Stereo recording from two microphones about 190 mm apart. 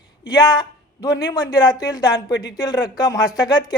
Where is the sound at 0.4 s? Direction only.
25° left (ahead or behind).